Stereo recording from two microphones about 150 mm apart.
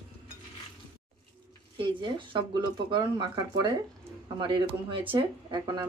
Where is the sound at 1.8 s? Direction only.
35° right (ahead or behind).